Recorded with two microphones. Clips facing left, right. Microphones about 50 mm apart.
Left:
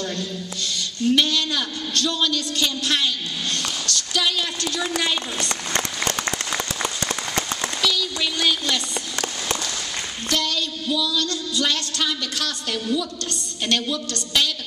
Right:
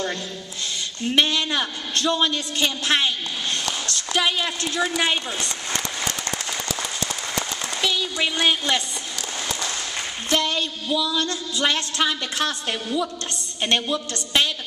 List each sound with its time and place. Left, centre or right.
1.0 s music: right
5.5 s applause: left
7.8 s speech: right
10.3 s music: right